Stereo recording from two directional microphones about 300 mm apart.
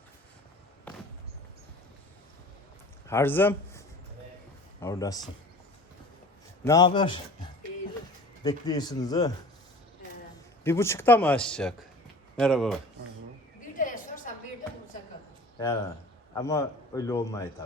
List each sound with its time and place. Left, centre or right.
3.1 s a man's voice: centre
6.7 s a man's voice: centre
8.4 s a man's voice: centre
10.6 s speech: centre
13.7 s a sound: left
15.5 s a man's voice: centre